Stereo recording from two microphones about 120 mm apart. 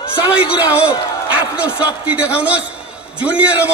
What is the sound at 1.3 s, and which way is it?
A man's voice, 10° right (ahead or behind).